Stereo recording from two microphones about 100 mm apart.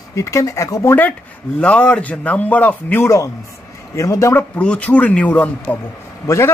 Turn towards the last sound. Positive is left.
turn(degrees=25)  # may be behind; listen again after turning